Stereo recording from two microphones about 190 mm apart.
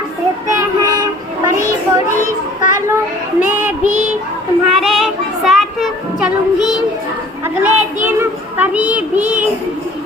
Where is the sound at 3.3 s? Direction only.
10° right (ahead or behind).